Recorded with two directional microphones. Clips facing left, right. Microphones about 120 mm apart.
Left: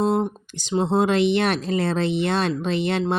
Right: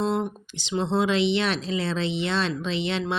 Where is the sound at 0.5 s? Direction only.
45° left (ahead or behind).